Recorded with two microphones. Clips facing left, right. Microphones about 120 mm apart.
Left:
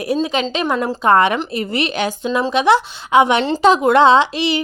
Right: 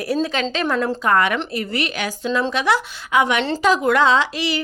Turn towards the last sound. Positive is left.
turn(degrees=25)  # may be behind; listen again after turning